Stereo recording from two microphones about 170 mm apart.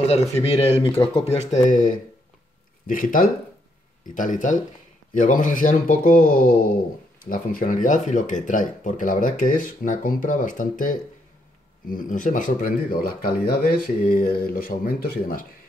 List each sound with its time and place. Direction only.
0.1 s speech: 35° left (ahead or behind); by 15.4 s 55° left (ahead or behind)